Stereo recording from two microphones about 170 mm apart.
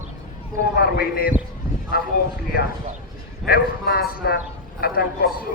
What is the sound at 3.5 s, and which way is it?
Speech, 65° left (ahead or behind).